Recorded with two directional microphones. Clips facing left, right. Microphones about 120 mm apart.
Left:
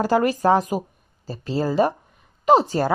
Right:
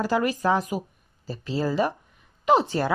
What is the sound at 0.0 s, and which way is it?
Speech, 40° left (ahead or behind).